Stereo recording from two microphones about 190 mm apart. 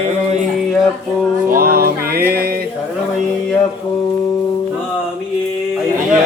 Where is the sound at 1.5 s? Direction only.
50° right (ahead or behind).